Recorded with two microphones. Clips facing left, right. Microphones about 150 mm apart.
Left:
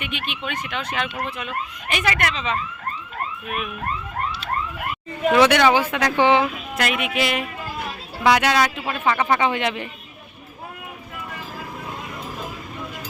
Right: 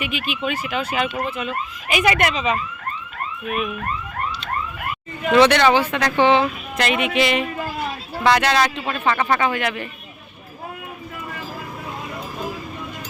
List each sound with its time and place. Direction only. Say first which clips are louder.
0.0 s speech: right 5 dB; 5° right (ahead or behind)
2.1 s speech: right 4 dB; 20° right (ahead or behind)
3.4 s speech: right 7 dB; centre (ahead or behind)
5.3 s speech: right 2 dB; 10° left (ahead or behind)